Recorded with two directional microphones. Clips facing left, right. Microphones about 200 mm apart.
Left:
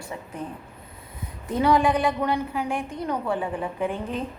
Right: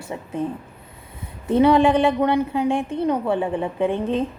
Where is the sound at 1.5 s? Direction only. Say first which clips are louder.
Right 6 dB; 25° right (ahead or behind).